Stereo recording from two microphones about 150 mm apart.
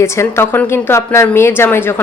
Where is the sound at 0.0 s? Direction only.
15° left (ahead or behind).